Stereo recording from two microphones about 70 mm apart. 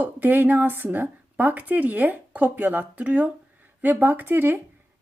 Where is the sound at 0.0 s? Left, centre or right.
Right.